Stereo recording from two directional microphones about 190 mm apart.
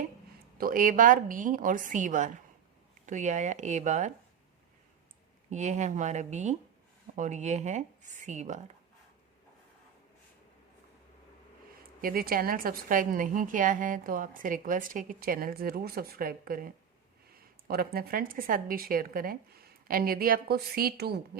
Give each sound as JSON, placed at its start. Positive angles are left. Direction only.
{"t": 0.6, "sound": "a woman's voice", "side_deg": -45}
{"t": 5.5, "sound": "speech", "side_deg": -40}
{"t": 12.0, "sound": "a woman's voice", "side_deg": -50}